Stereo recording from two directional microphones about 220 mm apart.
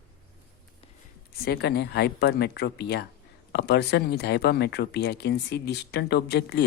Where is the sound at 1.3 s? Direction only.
45° left (ahead or behind).